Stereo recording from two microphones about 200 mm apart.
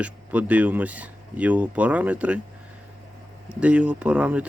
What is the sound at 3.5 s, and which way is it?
Speech, 5° right (ahead or behind).